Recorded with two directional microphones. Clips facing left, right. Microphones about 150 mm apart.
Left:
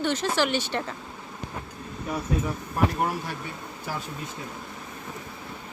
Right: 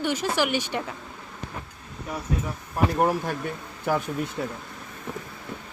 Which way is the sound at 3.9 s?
55° right (ahead or behind).